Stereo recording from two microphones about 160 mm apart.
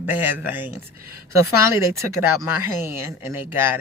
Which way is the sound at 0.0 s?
10° right (ahead or behind).